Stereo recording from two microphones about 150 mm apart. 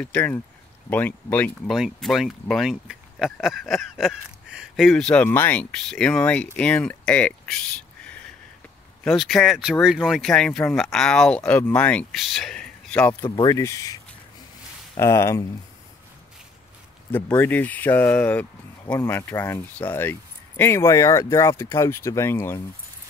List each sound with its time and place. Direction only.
0.0 s speech: 10° left (ahead or behind)
9.0 s speech: centre (ahead or behind)
13.2 s speech: 25° left (ahead or behind)
15.0 s speech: 20° left (ahead or behind)
17.1 s speech: 10° left (ahead or behind)